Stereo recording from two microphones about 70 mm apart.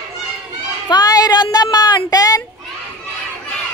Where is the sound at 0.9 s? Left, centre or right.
Left.